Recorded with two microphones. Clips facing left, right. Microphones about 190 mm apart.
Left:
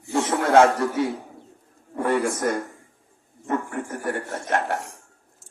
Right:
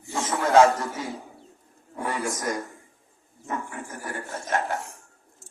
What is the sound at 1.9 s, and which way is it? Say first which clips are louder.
A man's voice: left 7 dB; 60° left (ahead or behind).